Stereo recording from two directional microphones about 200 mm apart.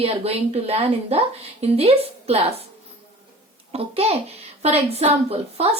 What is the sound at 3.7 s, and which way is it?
A woman's voice, 30° right (ahead or behind).